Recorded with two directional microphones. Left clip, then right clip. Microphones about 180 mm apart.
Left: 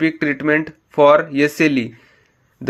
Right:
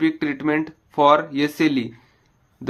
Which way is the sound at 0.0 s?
20° left (ahead or behind).